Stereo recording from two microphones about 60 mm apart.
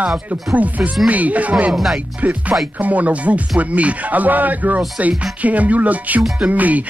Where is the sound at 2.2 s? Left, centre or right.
Right.